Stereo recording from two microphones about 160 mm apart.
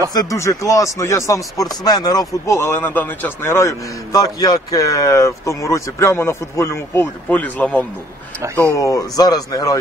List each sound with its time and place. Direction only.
0.1 s speech: 20° left (ahead or behind)
8.7 s speech: 20° left (ahead or behind)